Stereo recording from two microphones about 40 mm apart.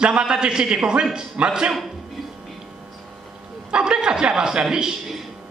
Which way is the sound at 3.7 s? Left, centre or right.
Right.